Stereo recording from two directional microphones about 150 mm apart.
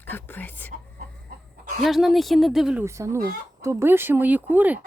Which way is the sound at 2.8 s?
20° right (ahead or behind).